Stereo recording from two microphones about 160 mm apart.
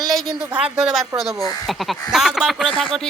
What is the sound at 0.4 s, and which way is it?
Speech, 5° right (ahead or behind).